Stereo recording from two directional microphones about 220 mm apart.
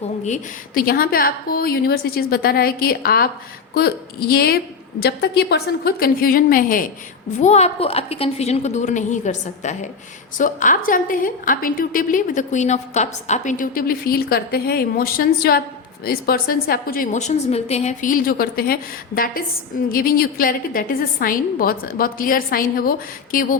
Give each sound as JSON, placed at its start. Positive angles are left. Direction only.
{"t": 0.3, "sound": "a woman's voice", "side_deg": 40}